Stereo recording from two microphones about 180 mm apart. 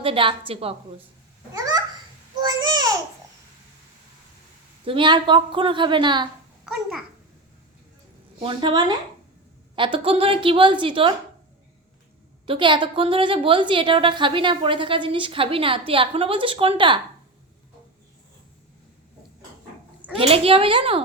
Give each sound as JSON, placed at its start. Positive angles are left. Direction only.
{"t": 0.0, "sound": "a woman's voice", "side_deg": -30}
{"t": 1.5, "sound": "babbling", "side_deg": -20}
{"t": 4.9, "sound": "a woman's voice", "side_deg": -25}
{"t": 8.4, "sound": "a woman's voice", "side_deg": -25}
{"t": 12.5, "sound": "a woman's voice", "side_deg": -25}
{"t": 20.1, "sound": "a woman's voice", "side_deg": -30}